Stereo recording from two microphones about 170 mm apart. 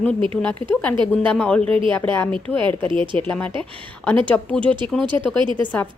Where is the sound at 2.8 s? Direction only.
30° right (ahead or behind).